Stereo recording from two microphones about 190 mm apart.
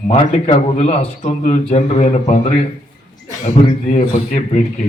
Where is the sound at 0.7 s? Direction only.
35° left (ahead or behind).